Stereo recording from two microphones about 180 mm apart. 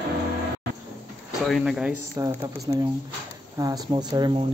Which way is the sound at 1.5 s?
5° right (ahead or behind).